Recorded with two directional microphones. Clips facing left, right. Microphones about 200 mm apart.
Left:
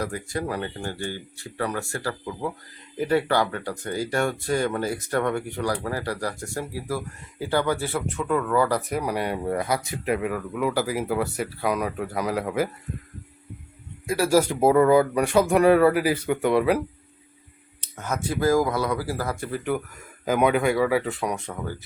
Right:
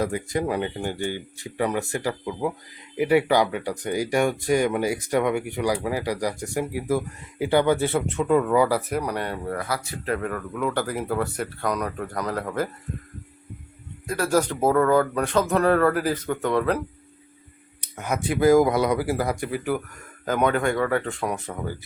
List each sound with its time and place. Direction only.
0.0 s speech: 20° right (ahead or behind)
8.9 s speech: 5° left (ahead or behind)
9.5 s speech: 20° left (ahead or behind)
10.2 s speech: 5° left (ahead or behind)
14.1 s speech: 10° left (ahead or behind)
17.7 s speech: 15° right (ahead or behind)
20.2 s speech: 10° left (ahead or behind)